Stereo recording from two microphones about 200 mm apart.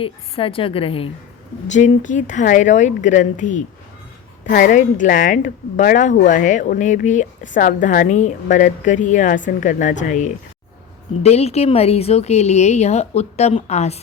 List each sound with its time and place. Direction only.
0.0 s a woman's voice: 25° left (ahead or behind)
1.7 s a woman's voice: 40° left (ahead or behind)